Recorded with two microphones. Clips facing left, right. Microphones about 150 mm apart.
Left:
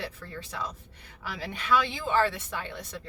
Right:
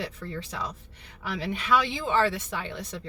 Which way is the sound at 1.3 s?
20° right (ahead or behind).